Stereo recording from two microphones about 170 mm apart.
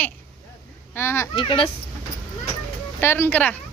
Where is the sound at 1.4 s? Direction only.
30° left (ahead or behind).